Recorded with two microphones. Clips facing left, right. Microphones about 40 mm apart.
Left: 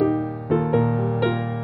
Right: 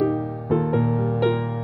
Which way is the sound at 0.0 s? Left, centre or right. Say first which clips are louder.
Left 1 dB; left.